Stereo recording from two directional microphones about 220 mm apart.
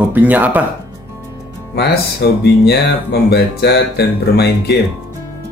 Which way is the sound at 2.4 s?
45° left (ahead or behind).